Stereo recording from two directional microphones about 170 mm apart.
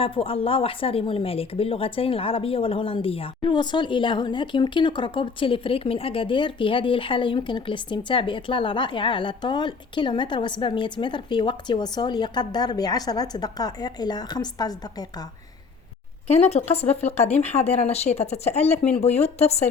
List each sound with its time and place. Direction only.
0.0 s speech: 30° left (ahead or behind)
16.2 s speech: 35° left (ahead or behind)